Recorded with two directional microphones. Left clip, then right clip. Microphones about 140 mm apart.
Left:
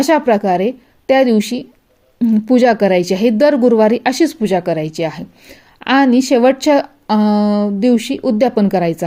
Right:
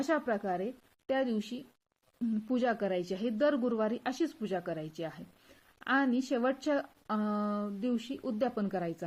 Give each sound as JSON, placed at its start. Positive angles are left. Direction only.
{"t": 0.0, "sound": "speech", "side_deg": 35}